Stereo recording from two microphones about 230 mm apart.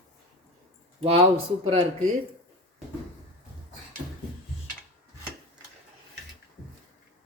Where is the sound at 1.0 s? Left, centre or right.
Right.